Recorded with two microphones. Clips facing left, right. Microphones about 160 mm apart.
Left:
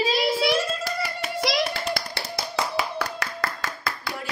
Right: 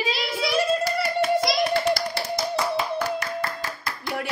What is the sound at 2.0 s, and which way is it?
Clapping, 65° left (ahead or behind).